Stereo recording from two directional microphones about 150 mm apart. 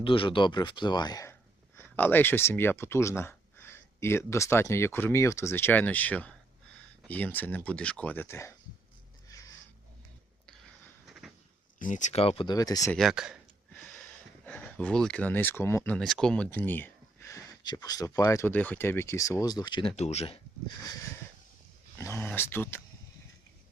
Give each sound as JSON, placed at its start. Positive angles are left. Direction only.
{"t": 0.0, "sound": "speech", "side_deg": 35}
{"t": 11.0, "sound": "a sound", "side_deg": 0}
{"t": 11.8, "sound": "speech", "side_deg": 55}
{"t": 12.5, "sound": "speech", "side_deg": 25}
{"t": 12.9, "sound": "speech", "side_deg": 0}
{"t": 14.4, "sound": "speech", "side_deg": 10}
{"t": 16.0, "sound": "speech", "side_deg": 0}
{"t": 20.0, "sound": "speech", "side_deg": 45}
{"t": 21.9, "sound": "speech", "side_deg": 15}